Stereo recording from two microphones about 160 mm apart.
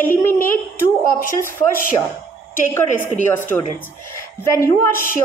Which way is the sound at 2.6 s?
15° left (ahead or behind).